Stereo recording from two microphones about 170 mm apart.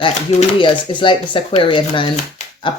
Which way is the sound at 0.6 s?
30° left (ahead or behind).